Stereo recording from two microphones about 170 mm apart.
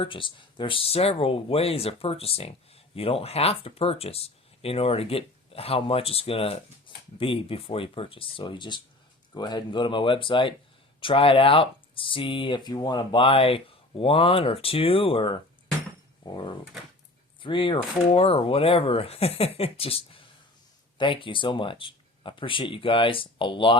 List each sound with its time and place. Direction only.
0.0 s speech: 30° left (ahead or behind)